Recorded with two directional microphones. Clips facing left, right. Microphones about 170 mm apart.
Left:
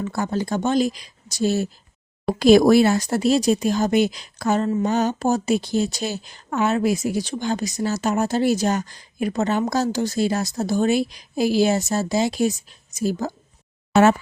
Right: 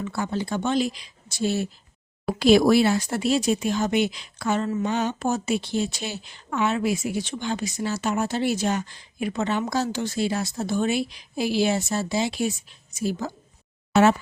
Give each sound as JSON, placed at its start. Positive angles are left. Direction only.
{"t": 0.0, "sound": "speech", "side_deg": 40}